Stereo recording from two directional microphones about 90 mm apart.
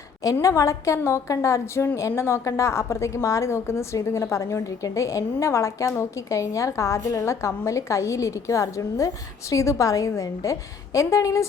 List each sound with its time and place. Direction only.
0.4 s a woman's voice: 35° left (ahead or behind)